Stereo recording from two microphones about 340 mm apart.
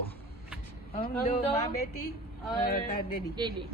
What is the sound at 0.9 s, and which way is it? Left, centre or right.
A woman's voice, centre.